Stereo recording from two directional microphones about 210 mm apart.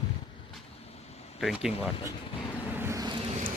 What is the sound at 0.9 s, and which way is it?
Vehicle, 30° left (ahead or behind).